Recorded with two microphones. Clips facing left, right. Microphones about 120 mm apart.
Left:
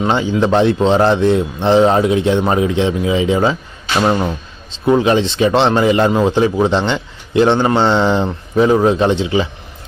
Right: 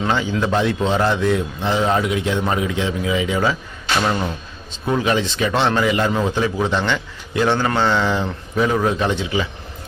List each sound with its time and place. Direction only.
0.0 s a man's voice: 20° left (ahead or behind)